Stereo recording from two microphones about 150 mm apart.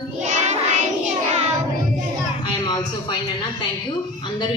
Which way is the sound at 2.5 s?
30° left (ahead or behind).